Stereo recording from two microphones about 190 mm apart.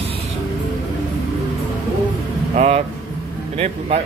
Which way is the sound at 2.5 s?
35° right (ahead or behind).